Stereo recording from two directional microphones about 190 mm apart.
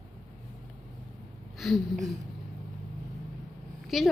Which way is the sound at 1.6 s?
Centre (ahead or behind).